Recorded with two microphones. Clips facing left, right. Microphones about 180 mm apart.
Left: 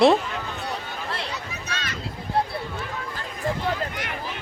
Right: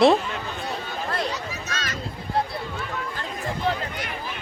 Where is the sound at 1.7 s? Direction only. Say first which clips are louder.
Left 2 dB; 40° right (ahead or behind).